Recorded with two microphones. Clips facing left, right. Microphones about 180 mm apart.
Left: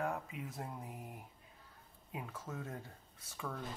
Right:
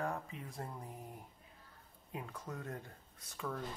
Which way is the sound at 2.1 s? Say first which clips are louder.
Even; 5° left (ahead or behind).